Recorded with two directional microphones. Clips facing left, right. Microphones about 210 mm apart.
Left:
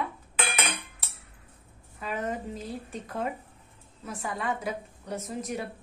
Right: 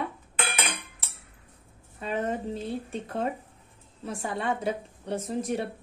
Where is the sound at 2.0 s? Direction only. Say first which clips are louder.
Right 3 dB; 30° right (ahead or behind).